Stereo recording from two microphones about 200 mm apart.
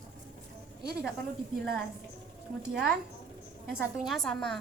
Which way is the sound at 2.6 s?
Centre (ahead or behind).